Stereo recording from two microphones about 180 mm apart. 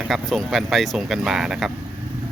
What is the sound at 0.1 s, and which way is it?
Speech, centre (ahead or behind).